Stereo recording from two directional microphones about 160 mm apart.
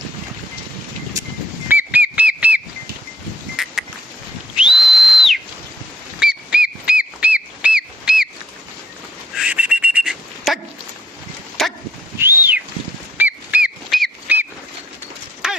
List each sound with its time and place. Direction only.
1.2 s a sound: 20° right (ahead or behind)
1.6 s whistle: 10° right (ahead or behind)
3.6 s a sound: 5° right (ahead or behind)
4.5 s whistle: 5° right (ahead or behind)
9.3 s honk: 5° right (ahead or behind)
11.6 s dog: 5° left (ahead or behind)
12.1 s whistling: 15° right (ahead or behind)
13.1 s whistle: 10° right (ahead or behind)
15.4 s a sound: 5° right (ahead or behind)